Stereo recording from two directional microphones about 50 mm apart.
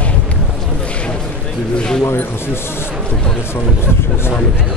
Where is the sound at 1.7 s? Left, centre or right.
Centre.